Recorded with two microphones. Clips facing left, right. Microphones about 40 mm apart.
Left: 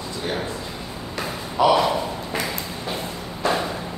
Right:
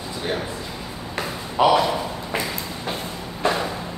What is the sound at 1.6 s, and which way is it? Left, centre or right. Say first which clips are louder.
Speech: even; right.